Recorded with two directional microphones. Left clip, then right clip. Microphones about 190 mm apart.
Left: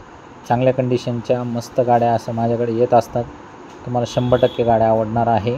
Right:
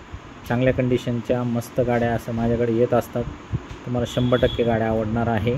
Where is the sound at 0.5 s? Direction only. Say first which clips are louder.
Left 4 dB; 20° left (ahead or behind).